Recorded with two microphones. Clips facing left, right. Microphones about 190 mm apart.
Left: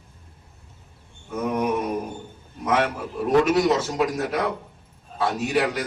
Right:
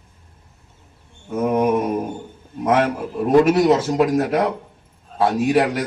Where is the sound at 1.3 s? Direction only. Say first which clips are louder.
Right 6 dB; 50° right (ahead or behind).